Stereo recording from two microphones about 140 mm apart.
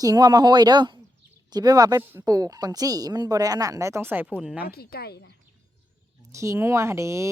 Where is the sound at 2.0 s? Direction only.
15° right (ahead or behind).